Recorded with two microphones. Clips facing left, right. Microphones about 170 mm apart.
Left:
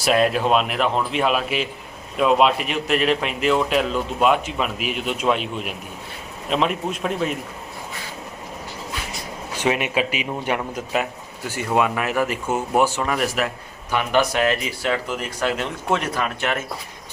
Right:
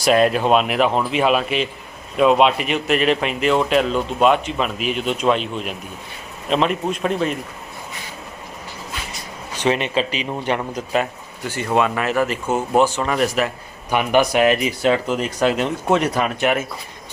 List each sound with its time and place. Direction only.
0.0 s a man's voice: centre (ahead or behind)
9.6 s speech: 10° left (ahead or behind)
13.9 s speech: 15° right (ahead or behind)